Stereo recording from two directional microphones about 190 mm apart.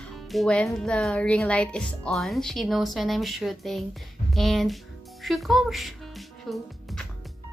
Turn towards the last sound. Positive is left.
turn(degrees=0)  # may be behind; listen again after turning